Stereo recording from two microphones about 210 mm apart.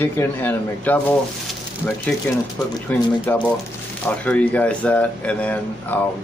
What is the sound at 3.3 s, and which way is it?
Speech, 10° left (ahead or behind).